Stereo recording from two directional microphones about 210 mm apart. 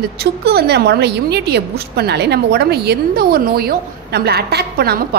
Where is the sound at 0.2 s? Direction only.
50° right (ahead or behind).